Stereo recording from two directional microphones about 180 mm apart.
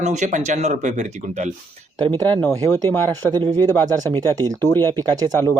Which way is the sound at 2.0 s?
20° right (ahead or behind).